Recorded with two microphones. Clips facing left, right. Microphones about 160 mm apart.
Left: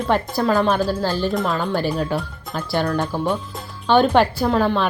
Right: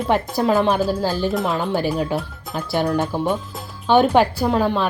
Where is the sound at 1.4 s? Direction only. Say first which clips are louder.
Right 1 dB; 20° right (ahead or behind).